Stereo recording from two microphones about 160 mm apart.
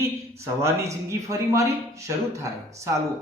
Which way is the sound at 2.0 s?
20° right (ahead or behind).